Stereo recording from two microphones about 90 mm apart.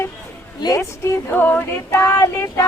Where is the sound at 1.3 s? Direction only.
20° left (ahead or behind).